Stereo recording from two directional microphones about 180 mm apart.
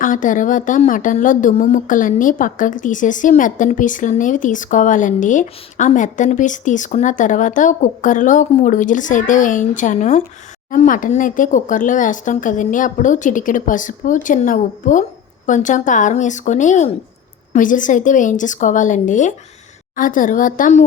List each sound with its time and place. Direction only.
0.0 s a woman's voice: 45° left (ahead or behind)